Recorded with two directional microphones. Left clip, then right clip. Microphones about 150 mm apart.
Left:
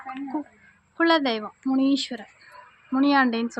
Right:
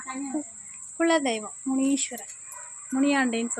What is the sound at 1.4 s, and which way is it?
Cricket, 20° left (ahead or behind).